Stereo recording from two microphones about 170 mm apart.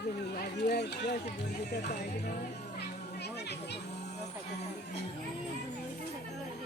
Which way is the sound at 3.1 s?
75° left (ahead or behind).